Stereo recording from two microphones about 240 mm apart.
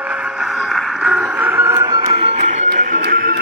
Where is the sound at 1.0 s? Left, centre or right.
Centre.